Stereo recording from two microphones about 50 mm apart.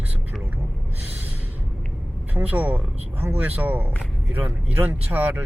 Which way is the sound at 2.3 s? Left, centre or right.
Right.